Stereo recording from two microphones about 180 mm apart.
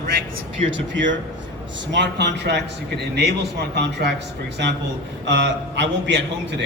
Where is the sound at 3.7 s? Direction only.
70° right (ahead or behind).